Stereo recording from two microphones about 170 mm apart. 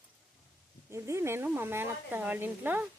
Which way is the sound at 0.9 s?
15° right (ahead or behind).